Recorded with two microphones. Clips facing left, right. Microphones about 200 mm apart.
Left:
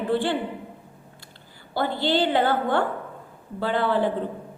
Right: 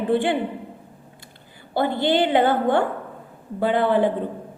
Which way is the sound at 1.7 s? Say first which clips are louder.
Right 3 dB; 20° right (ahead or behind).